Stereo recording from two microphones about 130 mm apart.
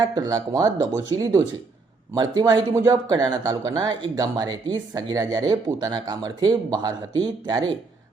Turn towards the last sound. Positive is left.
turn(degrees=-30)  # may be behind; listen again after turning